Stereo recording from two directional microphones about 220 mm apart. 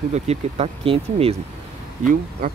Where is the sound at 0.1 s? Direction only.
30° right (ahead or behind).